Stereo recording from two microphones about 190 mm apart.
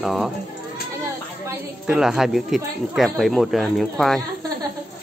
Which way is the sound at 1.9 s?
5° right (ahead or behind).